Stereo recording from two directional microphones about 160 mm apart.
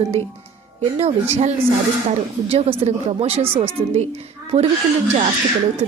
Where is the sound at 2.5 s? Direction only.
40° right (ahead or behind).